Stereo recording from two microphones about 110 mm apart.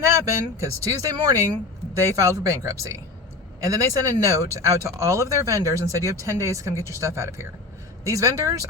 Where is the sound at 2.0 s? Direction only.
25° right (ahead or behind).